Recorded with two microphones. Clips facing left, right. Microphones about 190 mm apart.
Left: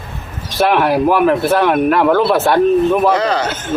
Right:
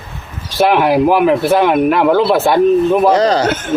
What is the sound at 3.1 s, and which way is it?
Speech, 35° right (ahead or behind).